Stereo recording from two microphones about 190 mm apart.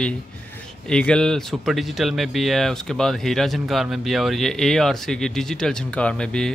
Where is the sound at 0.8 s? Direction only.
5° left (ahead or behind).